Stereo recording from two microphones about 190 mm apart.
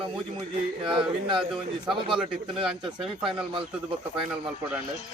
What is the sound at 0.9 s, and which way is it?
Speech, 25° right (ahead or behind).